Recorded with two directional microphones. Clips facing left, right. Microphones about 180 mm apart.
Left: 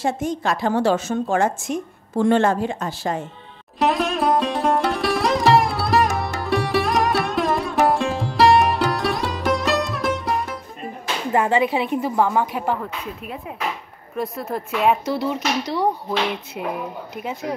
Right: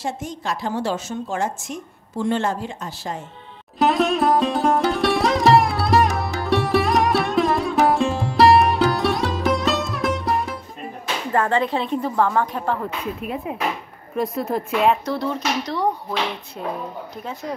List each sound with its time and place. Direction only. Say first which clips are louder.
0.0 s a woman's voice: left 5 dB; 55° left (ahead or behind)
3.8 s sitar: right 2 dB; centre (ahead or behind)
11.3 s speech: left 2 dB; 10° left (ahead or behind)
14.1 s a woman's voice: right 3 dB; centre (ahead or behind)